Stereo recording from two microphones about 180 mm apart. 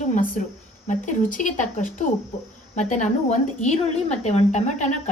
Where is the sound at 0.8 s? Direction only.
45° left (ahead or behind).